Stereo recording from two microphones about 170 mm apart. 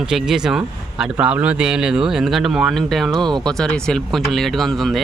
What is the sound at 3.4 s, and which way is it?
Speech, 5° left (ahead or behind).